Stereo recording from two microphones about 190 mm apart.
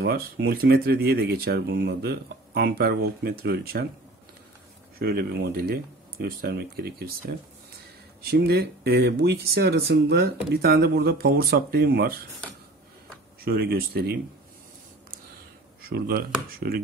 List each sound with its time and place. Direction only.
0.0 s speech: 60° right (ahead or behind)
4.9 s speech: 50° right (ahead or behind)
13.4 s speech: 55° right (ahead or behind)
15.9 s speech: 50° right (ahead or behind)